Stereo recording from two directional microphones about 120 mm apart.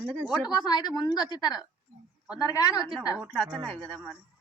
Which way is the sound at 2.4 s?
30° left (ahead or behind).